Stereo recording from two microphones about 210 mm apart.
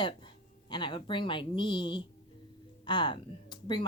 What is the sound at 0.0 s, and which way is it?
Speech, 20° left (ahead or behind).